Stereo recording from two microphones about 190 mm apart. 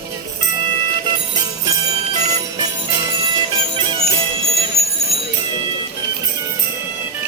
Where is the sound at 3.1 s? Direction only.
25° right (ahead or behind).